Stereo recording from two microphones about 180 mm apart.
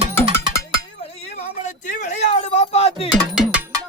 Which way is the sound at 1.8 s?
45° left (ahead or behind).